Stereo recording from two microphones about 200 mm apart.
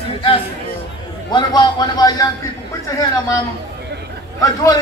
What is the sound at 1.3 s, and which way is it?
Speech, 20° left (ahead or behind).